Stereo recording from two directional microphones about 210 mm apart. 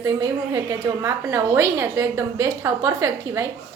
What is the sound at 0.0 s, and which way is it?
A woman's voice, 15° right (ahead or behind).